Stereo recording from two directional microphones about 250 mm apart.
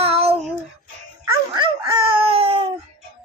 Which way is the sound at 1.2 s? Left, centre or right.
Centre.